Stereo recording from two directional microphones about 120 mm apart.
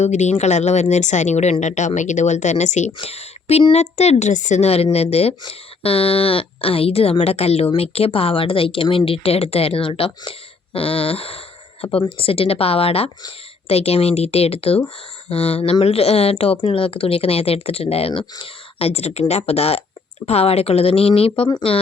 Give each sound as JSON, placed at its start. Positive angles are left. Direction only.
{"t": 0.0, "sound": "speech", "side_deg": 75}
{"t": 2.0, "sound": "speech", "side_deg": 90}
{"t": 3.0, "sound": "a woman's voice", "side_deg": 60}